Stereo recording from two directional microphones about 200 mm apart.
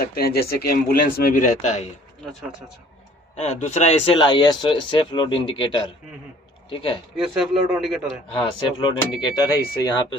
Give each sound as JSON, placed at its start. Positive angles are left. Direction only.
{"t": 0.1, "sound": "speech", "side_deg": 50}
{"t": 3.3, "sound": "speech", "side_deg": 35}
{"t": 7.2, "sound": "a man's voice", "side_deg": -5}
{"t": 8.3, "sound": "speech", "side_deg": 25}